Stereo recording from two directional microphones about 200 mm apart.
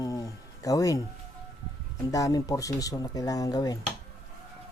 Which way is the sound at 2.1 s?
15° left (ahead or behind).